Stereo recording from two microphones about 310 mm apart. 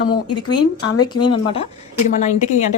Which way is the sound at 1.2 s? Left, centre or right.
Centre.